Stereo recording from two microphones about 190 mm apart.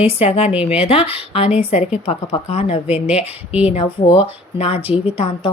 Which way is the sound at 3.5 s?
5° right (ahead or behind).